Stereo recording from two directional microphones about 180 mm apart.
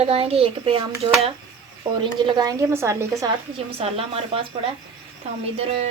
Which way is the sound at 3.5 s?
35° right (ahead or behind).